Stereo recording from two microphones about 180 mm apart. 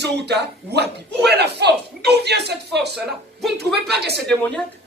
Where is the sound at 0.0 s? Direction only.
70° right (ahead or behind).